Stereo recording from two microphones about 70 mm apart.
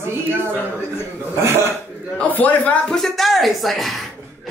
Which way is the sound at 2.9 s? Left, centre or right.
Centre.